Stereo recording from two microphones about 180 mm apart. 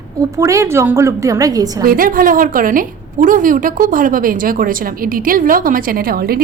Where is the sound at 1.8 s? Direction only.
55° right (ahead or behind).